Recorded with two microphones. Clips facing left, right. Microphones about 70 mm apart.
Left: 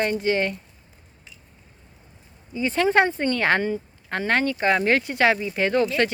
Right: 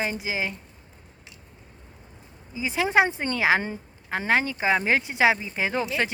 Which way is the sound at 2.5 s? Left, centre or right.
Centre.